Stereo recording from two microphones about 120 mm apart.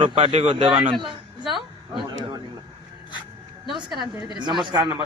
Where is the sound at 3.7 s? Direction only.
40° right (ahead or behind).